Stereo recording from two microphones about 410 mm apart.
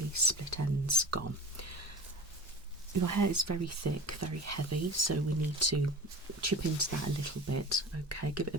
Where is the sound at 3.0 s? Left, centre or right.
Right.